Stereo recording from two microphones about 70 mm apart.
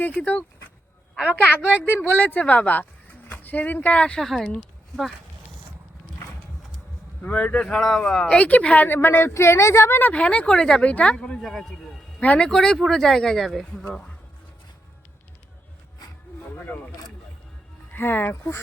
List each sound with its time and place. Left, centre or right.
0.1 s speech: centre
4.2 s speech: centre
7.2 s speech: left
9.3 s speech: left
10.0 s speech: centre
12.2 s speech: left
12.5 s speech: centre
17.9 s speech: left